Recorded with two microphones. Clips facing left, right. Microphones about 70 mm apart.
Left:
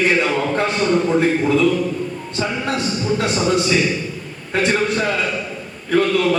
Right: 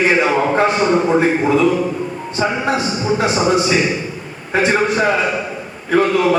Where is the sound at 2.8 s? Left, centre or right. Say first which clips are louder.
Right 3 dB; centre.